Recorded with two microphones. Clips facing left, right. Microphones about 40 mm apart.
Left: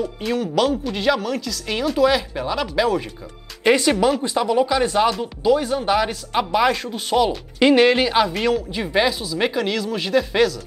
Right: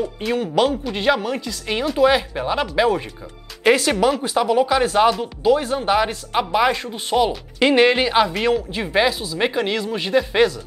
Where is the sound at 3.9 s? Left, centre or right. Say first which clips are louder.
Even; centre.